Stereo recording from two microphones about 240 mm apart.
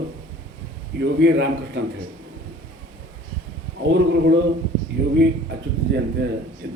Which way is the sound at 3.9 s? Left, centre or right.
Right.